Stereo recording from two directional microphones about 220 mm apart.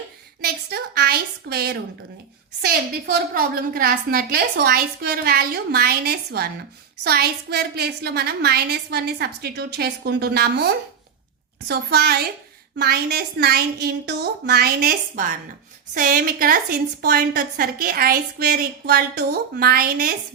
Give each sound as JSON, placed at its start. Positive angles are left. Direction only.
{"t": 0.4, "sound": "a woman's voice", "side_deg": -45}